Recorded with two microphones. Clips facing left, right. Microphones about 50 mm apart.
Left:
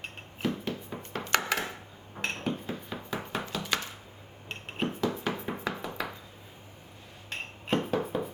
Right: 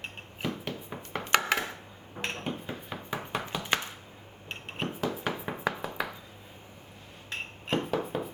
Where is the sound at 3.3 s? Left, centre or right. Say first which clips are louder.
Right 2 dB; centre.